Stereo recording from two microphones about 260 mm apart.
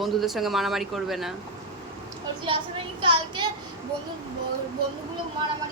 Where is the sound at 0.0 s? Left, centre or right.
Centre.